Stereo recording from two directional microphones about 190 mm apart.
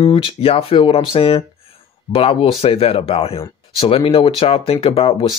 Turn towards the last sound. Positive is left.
turn(degrees=30)  # may be behind; listen again after turning